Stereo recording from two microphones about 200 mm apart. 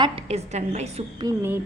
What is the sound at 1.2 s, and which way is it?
Speech, 10° right (ahead or behind).